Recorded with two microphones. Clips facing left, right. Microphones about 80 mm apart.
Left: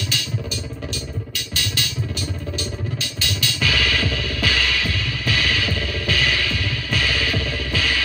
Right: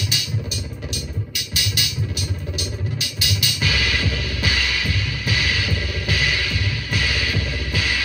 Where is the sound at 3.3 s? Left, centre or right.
Left.